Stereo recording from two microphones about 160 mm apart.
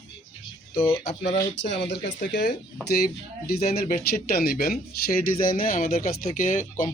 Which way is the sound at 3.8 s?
70° left (ahead or behind).